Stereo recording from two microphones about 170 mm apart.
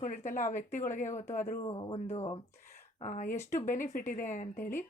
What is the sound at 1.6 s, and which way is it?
Speech, 30° left (ahead or behind).